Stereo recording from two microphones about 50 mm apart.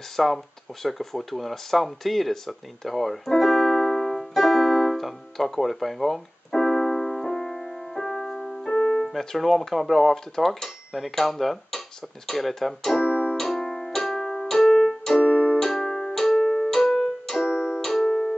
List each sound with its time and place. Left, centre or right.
0.1 s speech: centre
0.8 s a sound: centre
9.0 s speech: centre
13.8 s keyboard: centre
15.2 s keyboard: left
16.2 s keyboard: centre
17.5 s keyboard: centre